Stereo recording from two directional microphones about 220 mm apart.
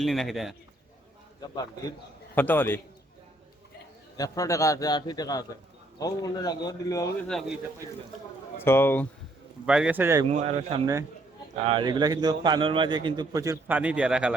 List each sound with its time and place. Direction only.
0.0 s speech: centre (ahead or behind)
2.3 s a man's voice: 10° left (ahead or behind)
4.2 s a man's voice: 15° left (ahead or behind)
7.3 s a man's voice: centre (ahead or behind)
9.6 s a man's voice: 5° right (ahead or behind)
10.2 s a man's voice: 30° right (ahead or behind); by 14.3 s 5° right (ahead or behind)